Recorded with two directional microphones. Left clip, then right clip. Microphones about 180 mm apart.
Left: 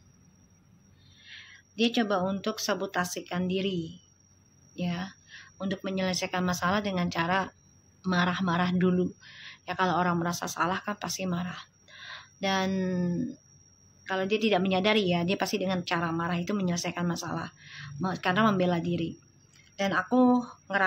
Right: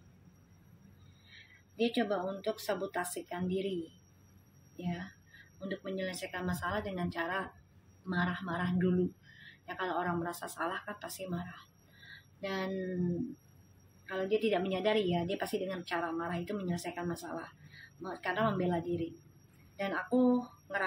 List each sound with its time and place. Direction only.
1.8 s a woman's voice: 40° left (ahead or behind)
4.7 s a woman's voice: 35° left (ahead or behind)
12.1 s a sound: 35° left (ahead or behind)
14.0 s a woman's voice: 40° left (ahead or behind)